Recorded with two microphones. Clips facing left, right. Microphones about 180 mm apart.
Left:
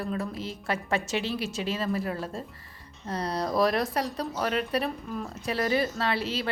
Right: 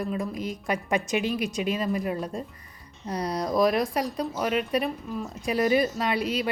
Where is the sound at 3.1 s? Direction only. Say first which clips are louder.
Right 2 dB; 30° left (ahead or behind).